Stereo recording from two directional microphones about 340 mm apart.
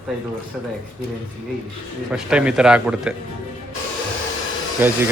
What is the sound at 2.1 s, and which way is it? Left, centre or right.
Speech, centre.